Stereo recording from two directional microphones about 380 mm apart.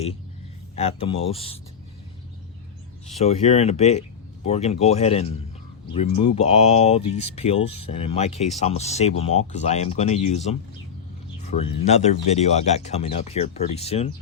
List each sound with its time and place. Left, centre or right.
0.8 s speech: centre
3.2 s speech: centre